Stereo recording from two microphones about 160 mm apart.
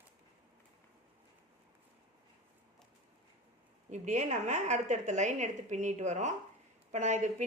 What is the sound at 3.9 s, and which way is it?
A woman's voice, 45° right (ahead or behind).